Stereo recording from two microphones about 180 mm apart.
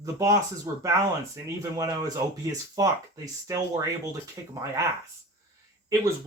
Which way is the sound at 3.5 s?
20° right (ahead or behind).